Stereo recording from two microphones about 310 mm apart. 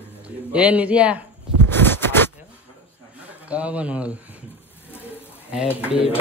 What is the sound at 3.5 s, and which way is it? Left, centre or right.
Speech, centre.